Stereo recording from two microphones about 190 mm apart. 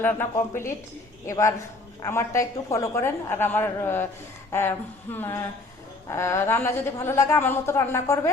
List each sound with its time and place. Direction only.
0.0 s a man's voice: 10° left (ahead or behind)
5.1 s a man's voice: 10° left (ahead or behind)